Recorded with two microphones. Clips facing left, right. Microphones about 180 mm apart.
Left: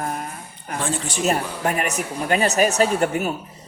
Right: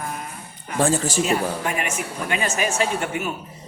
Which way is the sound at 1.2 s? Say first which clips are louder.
Even; 40° left (ahead or behind).